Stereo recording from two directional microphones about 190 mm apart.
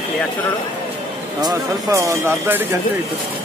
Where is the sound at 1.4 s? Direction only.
20° right (ahead or behind).